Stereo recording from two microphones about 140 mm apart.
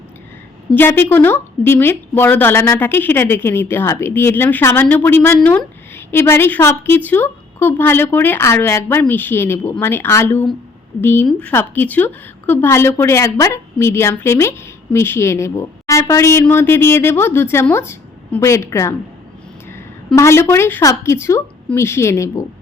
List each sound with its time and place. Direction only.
0.7 s a woman's voice: 15° left (ahead or behind)
20.1 s a woman's voice: 20° left (ahead or behind)